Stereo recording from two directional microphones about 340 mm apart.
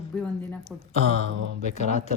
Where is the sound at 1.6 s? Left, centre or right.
Left.